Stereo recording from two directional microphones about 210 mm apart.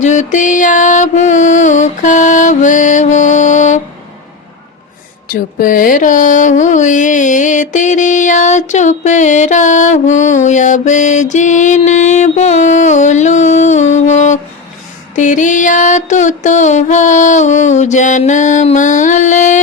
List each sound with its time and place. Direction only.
0.0 s music: 35° left (ahead or behind)
5.3 s mantra: 40° left (ahead or behind)